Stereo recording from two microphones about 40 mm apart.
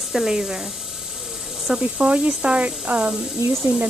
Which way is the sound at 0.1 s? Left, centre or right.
Centre.